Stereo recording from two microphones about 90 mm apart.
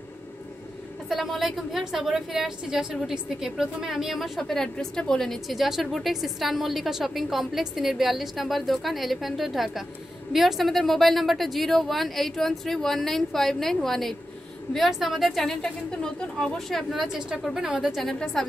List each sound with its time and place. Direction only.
1.0 s a woman's voice: centre (ahead or behind)